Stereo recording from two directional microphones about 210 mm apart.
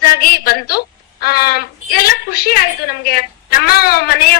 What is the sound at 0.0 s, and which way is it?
A woman's voice, 45° left (ahead or behind).